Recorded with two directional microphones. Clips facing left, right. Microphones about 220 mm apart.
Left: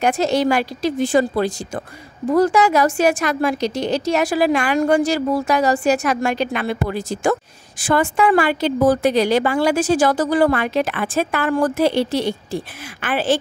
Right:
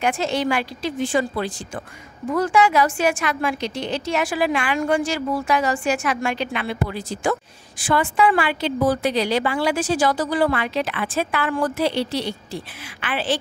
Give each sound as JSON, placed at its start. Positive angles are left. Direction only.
{"t": 0.0, "sound": "a woman's voice", "side_deg": 40}